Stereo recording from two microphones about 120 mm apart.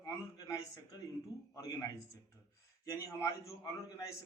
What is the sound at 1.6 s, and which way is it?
Speech, 25° left (ahead or behind).